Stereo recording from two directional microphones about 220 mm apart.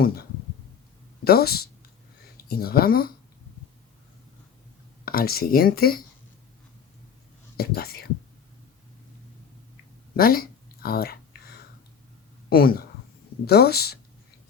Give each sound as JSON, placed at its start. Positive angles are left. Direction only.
{"t": 1.2, "sound": "speech", "side_deg": 45}
{"t": 5.0, "sound": "speech", "side_deg": 45}
{"t": 7.5, "sound": "speech", "side_deg": 45}
{"t": 10.2, "sound": "speech", "side_deg": 40}
{"t": 12.5, "sound": "speech", "side_deg": 45}